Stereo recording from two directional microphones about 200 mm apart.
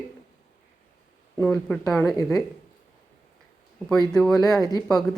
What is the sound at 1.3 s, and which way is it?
Speech, 5° left (ahead or behind).